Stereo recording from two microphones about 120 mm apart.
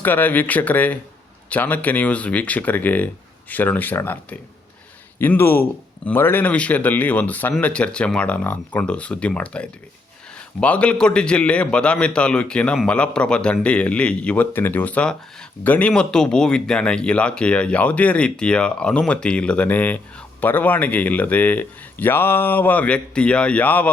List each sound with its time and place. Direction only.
0.0 s a man's voice: 15° left (ahead or behind)